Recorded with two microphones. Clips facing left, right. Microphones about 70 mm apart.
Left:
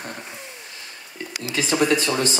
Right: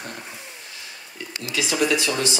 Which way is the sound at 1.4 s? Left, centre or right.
Left.